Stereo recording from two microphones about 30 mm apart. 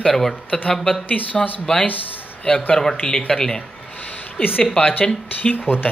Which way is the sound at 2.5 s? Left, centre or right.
Left.